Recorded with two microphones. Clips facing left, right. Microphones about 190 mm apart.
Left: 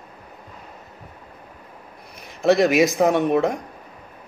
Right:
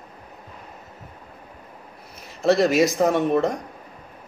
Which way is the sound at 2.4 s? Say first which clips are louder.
Left 1 dB; centre (ahead or behind).